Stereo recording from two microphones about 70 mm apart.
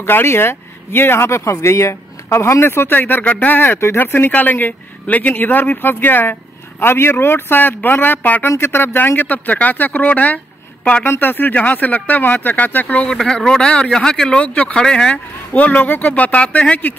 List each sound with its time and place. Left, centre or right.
0.0 s speech: left
13.1 s speech: centre
15.5 s speech: left